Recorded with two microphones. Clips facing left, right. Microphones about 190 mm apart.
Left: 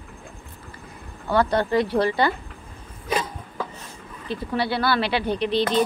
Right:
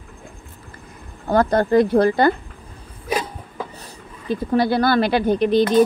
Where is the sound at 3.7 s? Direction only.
40° right (ahead or behind).